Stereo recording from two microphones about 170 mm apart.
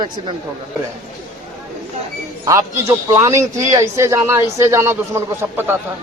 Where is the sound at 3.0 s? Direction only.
15° right (ahead or behind).